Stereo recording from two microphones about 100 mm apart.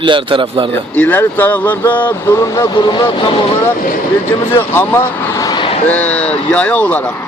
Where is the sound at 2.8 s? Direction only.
50° left (ahead or behind).